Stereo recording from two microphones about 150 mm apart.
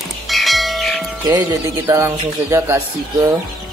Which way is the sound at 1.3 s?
20° right (ahead or behind).